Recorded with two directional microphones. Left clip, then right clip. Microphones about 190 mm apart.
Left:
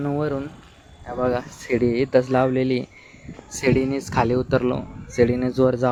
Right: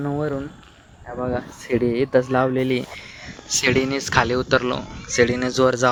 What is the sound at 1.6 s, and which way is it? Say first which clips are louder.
Speech: right 1 dB; 10° right (ahead or behind).